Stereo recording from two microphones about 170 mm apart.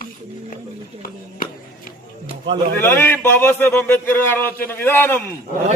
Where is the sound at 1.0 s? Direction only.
55° left (ahead or behind).